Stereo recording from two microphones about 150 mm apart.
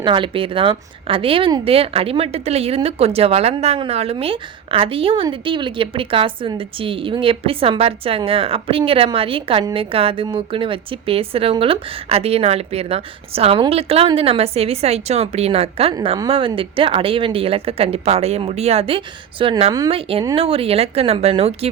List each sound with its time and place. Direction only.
0.0 s a woman's voice: 35° right (ahead or behind)